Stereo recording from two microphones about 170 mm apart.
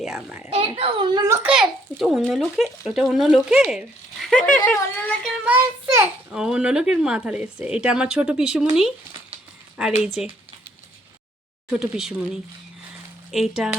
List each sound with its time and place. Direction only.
0.0 s a child's voice: 5° right (ahead or behind)
0.5 s a child's voice: 35° right (ahead or behind)
1.5 s a child's voice: 5° right (ahead or behind)
5.5 s a child's voice: 15° right (ahead or behind)
9.7 s a child's voice: 5° right (ahead or behind)
11.7 s a child's voice: 5° right (ahead or behind)